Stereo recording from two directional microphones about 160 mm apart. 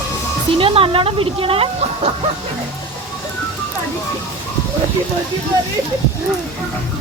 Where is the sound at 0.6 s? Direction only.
35° right (ahead or behind).